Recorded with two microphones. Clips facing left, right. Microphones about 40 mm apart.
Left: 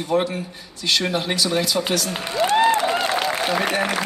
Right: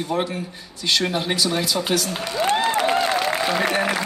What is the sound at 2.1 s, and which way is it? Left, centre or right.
Speech, centre.